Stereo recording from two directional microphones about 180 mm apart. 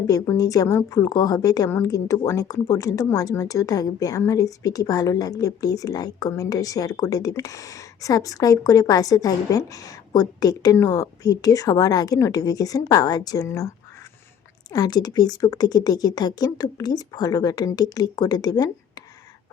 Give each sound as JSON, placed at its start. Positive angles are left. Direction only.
{"t": 0.1, "sound": "speech", "side_deg": 20}
{"t": 14.7, "sound": "speech", "side_deg": 20}